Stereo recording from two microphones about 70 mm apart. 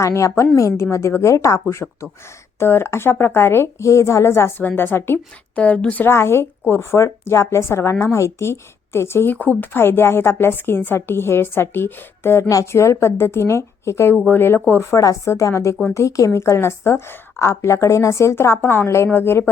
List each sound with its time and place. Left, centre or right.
0.0 s a woman's voice: left
5.5 s a woman's voice: centre
6.1 s a woman's voice: left